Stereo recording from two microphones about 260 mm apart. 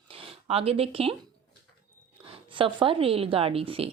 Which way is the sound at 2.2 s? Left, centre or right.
Centre.